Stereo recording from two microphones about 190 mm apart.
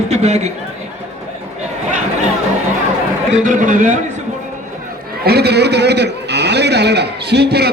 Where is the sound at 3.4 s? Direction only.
40° right (ahead or behind).